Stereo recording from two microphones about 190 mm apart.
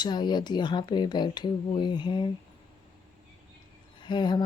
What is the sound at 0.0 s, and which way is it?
Speech, 25° left (ahead or behind).